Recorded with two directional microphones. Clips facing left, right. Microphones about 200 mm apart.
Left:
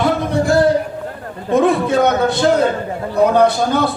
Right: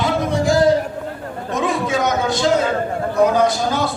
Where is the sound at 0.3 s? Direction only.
60° left (ahead or behind).